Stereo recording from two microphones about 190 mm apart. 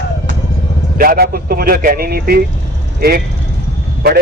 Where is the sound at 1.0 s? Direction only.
50° right (ahead or behind).